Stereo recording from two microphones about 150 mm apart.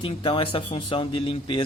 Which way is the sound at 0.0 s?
35° left (ahead or behind).